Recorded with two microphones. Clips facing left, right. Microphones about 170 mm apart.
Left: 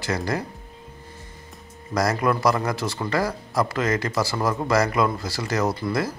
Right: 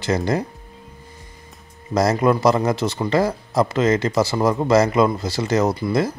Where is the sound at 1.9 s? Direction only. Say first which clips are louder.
Right 5 dB; 25° right (ahead or behind).